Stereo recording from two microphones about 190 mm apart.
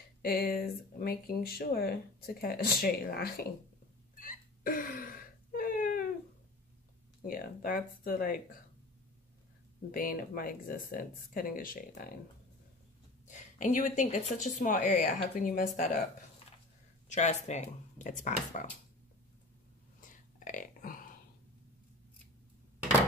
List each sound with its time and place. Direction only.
0.2 s speech: 55° left (ahead or behind)
4.2 s hiccup: 45° left (ahead or behind)
7.2 s speech: 50° left (ahead or behind)
9.8 s speech: 50° left (ahead or behind)
13.3 s speech: 45° left (ahead or behind)
17.1 s speech: 40° left (ahead or behind)
20.3 s burping: 45° left (ahead or behind)